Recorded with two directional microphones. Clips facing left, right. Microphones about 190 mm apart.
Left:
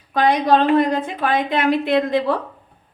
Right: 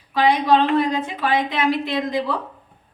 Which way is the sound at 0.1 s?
50° left (ahead or behind).